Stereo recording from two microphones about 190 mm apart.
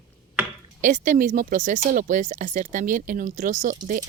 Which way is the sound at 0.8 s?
45° right (ahead or behind).